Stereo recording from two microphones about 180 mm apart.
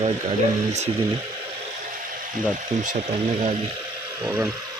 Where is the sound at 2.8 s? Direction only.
40° right (ahead or behind).